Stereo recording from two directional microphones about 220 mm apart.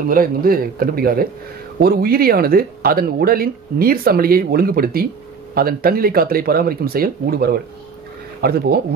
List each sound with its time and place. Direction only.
0.1 s a man's voice: 40° right (ahead or behind)